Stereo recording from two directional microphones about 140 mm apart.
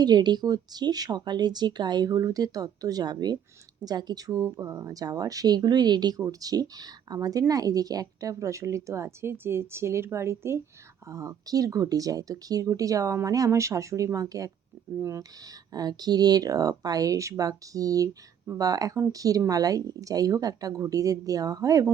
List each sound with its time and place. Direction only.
0.0 s a woman's voice: 30° right (ahead or behind)
15.7 s a woman's voice: 30° right (ahead or behind)